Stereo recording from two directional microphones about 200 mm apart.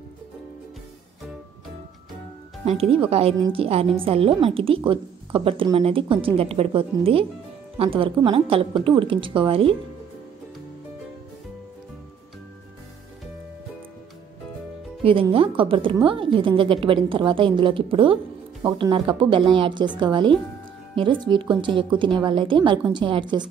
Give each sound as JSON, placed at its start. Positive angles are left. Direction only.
{"t": 2.6, "sound": "a woman's voice", "side_deg": -30}
{"t": 15.0, "sound": "a woman's voice", "side_deg": -25}